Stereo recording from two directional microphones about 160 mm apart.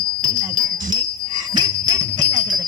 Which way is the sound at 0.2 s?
20° right (ahead or behind).